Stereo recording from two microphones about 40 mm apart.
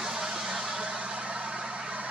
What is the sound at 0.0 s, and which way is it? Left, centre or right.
Vehicle, centre.